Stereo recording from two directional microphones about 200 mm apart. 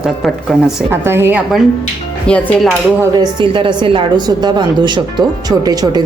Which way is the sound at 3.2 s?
25° right (ahead or behind).